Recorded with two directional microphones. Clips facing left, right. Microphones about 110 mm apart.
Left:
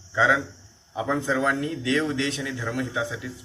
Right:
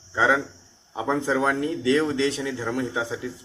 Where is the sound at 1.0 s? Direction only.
35° right (ahead or behind).